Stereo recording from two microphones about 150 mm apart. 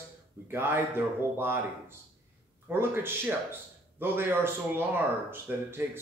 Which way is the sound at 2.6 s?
15° right (ahead or behind).